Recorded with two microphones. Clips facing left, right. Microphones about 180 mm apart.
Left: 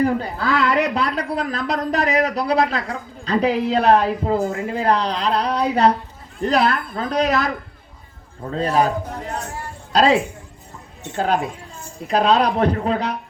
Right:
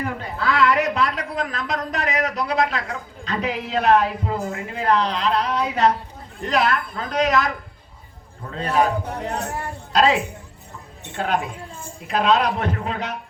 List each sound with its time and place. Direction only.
0.0 s speech: 35° left (ahead or behind)
9.9 s speech: 35° left (ahead or behind)